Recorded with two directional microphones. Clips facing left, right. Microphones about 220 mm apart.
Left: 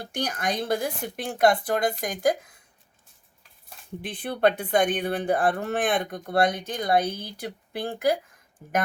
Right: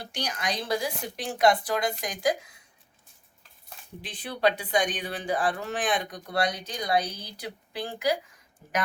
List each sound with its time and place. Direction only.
0.0 s speech: 55° left (ahead or behind)
4.0 s speech: 55° left (ahead or behind)